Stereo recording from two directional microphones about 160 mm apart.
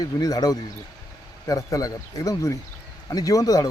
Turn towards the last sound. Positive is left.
turn(degrees=20)  # may be behind; listen again after turning